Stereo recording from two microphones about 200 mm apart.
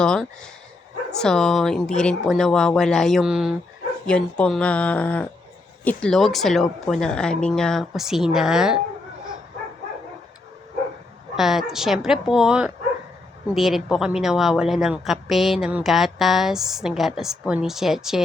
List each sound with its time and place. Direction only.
0.0 s speech: 5° left (ahead or behind)
11.3 s speech: centre (ahead or behind)